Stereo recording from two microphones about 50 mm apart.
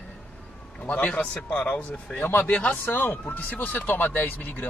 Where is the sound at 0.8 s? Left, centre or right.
Left.